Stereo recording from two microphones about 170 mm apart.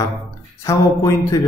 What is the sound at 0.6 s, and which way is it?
Speech, 20° left (ahead or behind).